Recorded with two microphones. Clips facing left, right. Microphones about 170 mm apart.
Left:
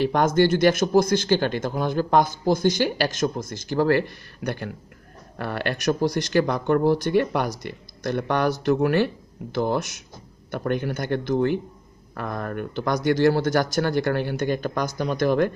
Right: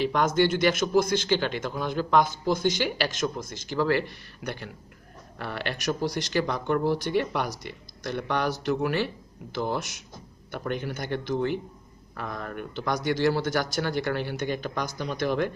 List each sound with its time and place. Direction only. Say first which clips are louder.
0.0 s speech: left 4 dB; 45° left (ahead or behind)